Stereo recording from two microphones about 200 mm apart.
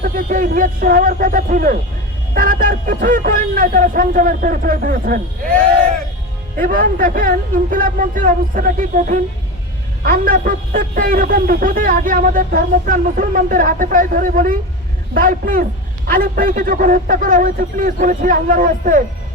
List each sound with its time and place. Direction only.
0.0 s a man's voice: 40° right (ahead or behind)
6.6 s a man's voice: 45° right (ahead or behind)